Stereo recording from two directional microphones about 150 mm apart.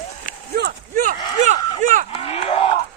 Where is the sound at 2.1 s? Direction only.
40° left (ahead or behind).